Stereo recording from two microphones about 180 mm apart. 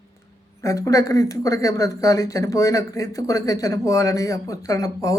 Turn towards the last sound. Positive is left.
turn(degrees=20)  # may be behind; listen again after turning